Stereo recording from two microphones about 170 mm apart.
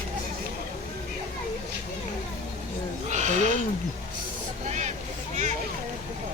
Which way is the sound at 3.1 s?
45° right (ahead or behind).